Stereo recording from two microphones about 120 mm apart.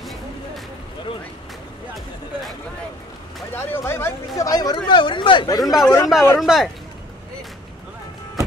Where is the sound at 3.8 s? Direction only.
20° left (ahead or behind).